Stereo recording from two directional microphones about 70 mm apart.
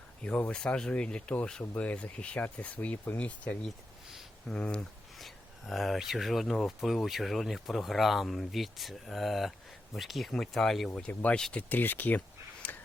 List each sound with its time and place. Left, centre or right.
0.2 s speech: centre
5.2 s speech: centre
11.1 s speech: left
12.6 s a sound: left